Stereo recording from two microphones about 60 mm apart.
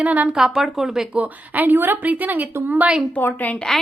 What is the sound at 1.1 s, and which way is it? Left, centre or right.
A woman's voice, right.